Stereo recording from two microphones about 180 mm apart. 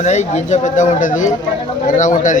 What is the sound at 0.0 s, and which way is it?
Speech, 40° left (ahead or behind).